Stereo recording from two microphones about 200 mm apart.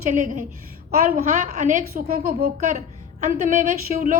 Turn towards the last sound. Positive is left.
turn(degrees=-40)  # may be behind; listen again after turning